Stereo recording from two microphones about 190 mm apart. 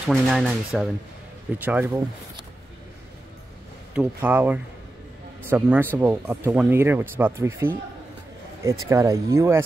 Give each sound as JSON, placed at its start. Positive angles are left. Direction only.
{"t": 0.0, "sound": "speech", "side_deg": 0}
{"t": 3.9, "sound": "speech", "side_deg": -10}